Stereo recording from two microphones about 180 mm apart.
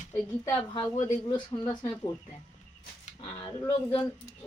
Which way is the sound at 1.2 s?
25° left (ahead or behind).